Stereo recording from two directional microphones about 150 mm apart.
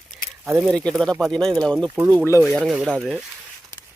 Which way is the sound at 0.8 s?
5° left (ahead or behind).